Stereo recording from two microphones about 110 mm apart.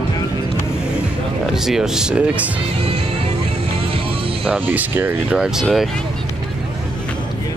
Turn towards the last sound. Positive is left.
turn(degrees=-5)  # may be behind; listen again after turning